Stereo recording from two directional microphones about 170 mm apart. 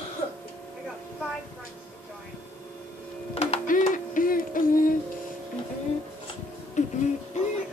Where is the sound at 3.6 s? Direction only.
50° left (ahead or behind).